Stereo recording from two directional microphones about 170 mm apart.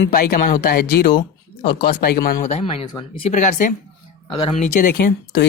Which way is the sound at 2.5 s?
35° left (ahead or behind).